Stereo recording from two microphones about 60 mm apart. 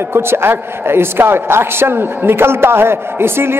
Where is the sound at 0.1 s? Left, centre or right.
Right.